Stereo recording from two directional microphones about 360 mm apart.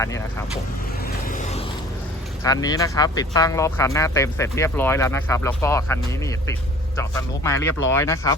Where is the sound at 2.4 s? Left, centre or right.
Centre.